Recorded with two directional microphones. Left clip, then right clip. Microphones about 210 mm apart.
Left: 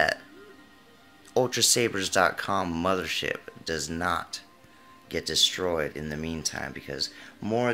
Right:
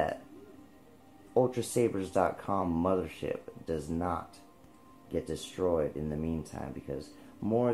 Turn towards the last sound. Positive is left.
turn(degrees=15)  # may be behind; listen again after turning